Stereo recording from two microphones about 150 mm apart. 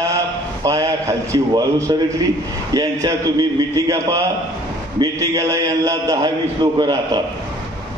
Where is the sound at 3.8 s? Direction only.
20° right (ahead or behind).